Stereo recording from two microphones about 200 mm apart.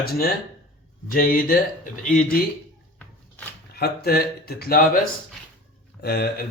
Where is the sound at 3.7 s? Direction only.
50° left (ahead or behind).